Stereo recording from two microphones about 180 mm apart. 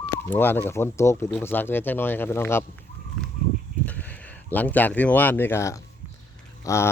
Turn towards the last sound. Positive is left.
turn(degrees=15)  # may be behind; listen again after turning